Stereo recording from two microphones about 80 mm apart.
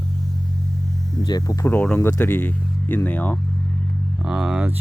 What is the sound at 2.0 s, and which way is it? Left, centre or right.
Speech, left.